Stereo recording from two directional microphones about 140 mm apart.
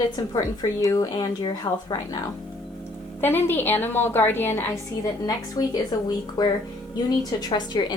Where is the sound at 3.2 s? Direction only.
15° left (ahead or behind).